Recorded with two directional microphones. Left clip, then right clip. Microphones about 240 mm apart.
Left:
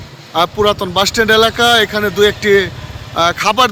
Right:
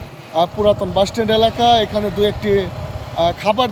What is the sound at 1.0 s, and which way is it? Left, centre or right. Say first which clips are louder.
Speech: left 4 dB; centre.